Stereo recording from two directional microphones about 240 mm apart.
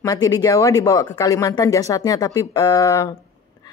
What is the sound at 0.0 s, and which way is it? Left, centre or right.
Speech, centre.